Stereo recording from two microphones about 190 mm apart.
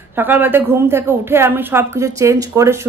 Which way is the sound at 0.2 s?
10° right (ahead or behind).